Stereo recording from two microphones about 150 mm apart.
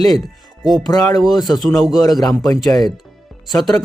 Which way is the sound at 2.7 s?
25° left (ahead or behind).